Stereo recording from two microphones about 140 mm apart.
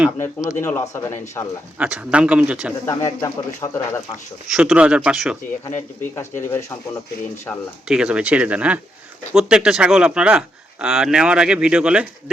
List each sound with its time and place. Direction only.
0.2 s speech: 15° left (ahead or behind)
1.8 s speech: 10° right (ahead or behind)
2.8 s speech: 25° left (ahead or behind)
4.4 s speech: 5° right (ahead or behind)
6.1 s speech: 20° left (ahead or behind)
7.9 s speech: 5° right (ahead or behind)